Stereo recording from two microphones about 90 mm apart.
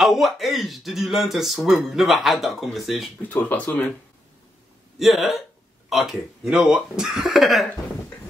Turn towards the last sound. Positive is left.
turn(degrees=0)  # may be behind; listen again after turning